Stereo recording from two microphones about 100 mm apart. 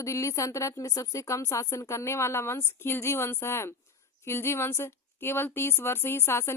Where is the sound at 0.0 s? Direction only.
30° left (ahead or behind).